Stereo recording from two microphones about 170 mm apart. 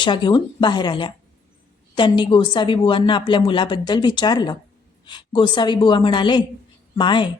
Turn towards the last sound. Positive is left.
turn(degrees=30)  # may be behind; listen again after turning